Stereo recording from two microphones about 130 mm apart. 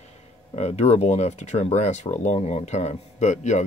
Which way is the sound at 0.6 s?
55° left (ahead or behind).